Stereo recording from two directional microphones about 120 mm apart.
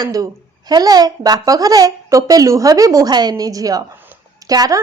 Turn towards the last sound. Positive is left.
turn(degrees=-30)  # may be behind; listen again after turning